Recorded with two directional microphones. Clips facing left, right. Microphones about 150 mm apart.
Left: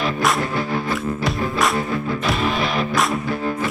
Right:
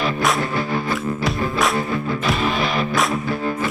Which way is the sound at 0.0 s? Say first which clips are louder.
Even; centre (ahead or behind).